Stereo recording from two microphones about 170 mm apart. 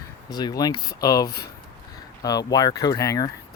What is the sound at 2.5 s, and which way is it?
Speech, 25° left (ahead or behind).